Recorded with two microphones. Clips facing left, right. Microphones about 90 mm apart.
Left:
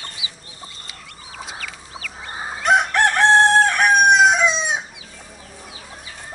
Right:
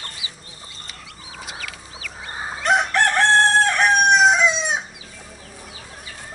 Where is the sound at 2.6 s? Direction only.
15° left (ahead or behind).